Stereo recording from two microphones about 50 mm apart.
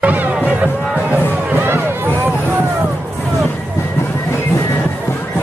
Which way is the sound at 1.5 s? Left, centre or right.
Right.